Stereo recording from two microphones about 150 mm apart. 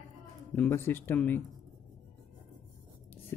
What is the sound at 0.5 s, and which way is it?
Speech, 10° left (ahead or behind).